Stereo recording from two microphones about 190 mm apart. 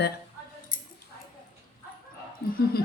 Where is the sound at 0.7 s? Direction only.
45° left (ahead or behind).